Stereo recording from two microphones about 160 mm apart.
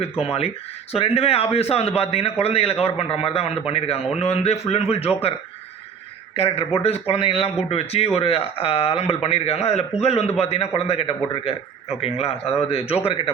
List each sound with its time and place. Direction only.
0.0 s speech: 35° left (ahead or behind)
6.3 s speech: 35° left (ahead or behind)